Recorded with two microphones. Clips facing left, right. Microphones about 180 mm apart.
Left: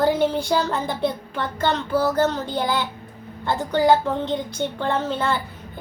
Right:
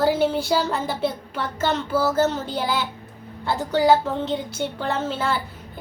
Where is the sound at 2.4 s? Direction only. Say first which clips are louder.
Left 2 dB; 15° left (ahead or behind).